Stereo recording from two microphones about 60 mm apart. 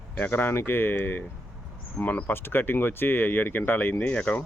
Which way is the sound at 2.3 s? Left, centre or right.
Left.